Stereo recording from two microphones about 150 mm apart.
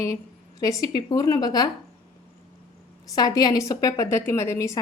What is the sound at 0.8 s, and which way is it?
Speech, 25° left (ahead or behind).